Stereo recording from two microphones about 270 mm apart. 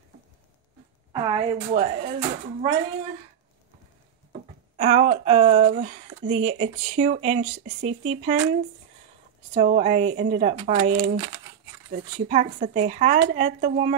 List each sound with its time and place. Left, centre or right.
1.1 s speech: centre
4.7 s speech: right
9.5 s speech: right